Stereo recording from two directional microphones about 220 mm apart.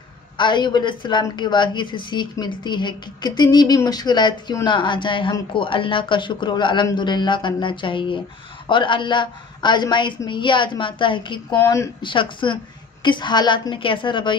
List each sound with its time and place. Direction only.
0.4 s a woman's voice: 20° left (ahead or behind)